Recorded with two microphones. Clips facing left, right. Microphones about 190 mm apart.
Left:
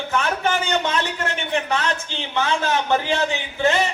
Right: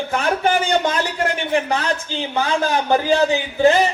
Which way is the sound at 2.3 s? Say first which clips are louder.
Right 2 dB; 35° right (ahead or behind).